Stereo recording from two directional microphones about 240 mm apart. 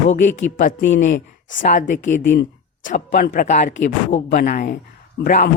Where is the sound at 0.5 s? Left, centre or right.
Left.